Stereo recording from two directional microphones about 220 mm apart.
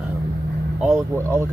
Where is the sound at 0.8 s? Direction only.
10° right (ahead or behind).